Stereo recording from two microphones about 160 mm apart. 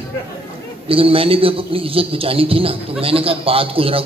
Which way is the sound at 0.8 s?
35° right (ahead or behind).